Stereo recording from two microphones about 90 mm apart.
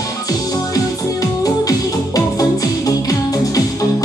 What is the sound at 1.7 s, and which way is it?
Music, 40° left (ahead or behind).